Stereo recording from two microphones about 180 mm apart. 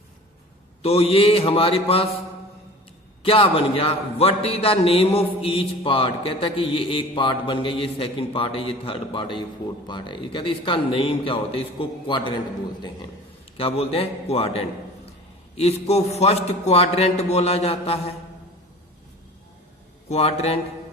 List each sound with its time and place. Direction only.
0.8 s a man's voice: 35° left (ahead or behind)
3.2 s a man's voice: 30° left (ahead or behind)
13.6 s a man's voice: 30° left (ahead or behind)
20.1 s a man's voice: 35° left (ahead or behind)